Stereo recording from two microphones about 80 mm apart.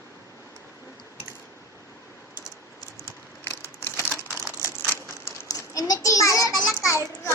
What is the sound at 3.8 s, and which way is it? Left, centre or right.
Crumpling, left.